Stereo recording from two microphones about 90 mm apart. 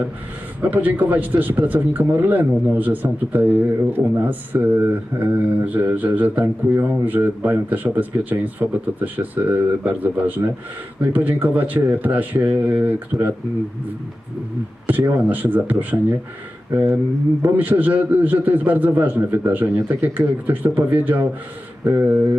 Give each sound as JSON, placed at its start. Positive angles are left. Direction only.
{"t": 0.6, "sound": "speech", "side_deg": -20}
{"t": 14.8, "sound": "speech", "side_deg": -20}
{"t": 16.7, "sound": "speech", "side_deg": -25}